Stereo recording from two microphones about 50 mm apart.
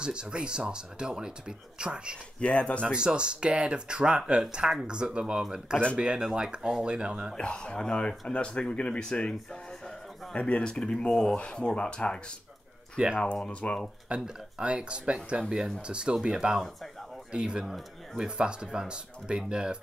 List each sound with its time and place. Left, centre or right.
0.0 s speech: centre
2.4 s speech: left
2.9 s speech: centre
7.3 s speech: centre
10.4 s speech: left
12.9 s speech: centre
13.5 s speech: left
14.0 s speech: centre